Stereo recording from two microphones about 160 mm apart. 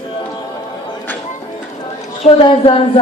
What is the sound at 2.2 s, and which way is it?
Speech, 35° left (ahead or behind).